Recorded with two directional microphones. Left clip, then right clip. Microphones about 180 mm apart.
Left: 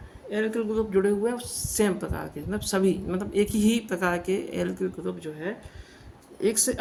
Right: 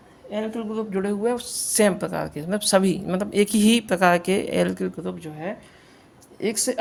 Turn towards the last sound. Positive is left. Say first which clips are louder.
# even
turn(degrees=-25)  # may be behind; listen again after turning